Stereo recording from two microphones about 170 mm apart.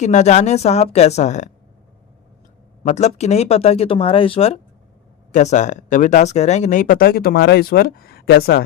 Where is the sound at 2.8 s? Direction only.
40° left (ahead or behind).